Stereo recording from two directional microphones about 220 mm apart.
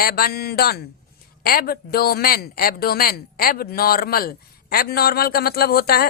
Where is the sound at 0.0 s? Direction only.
45° left (ahead or behind).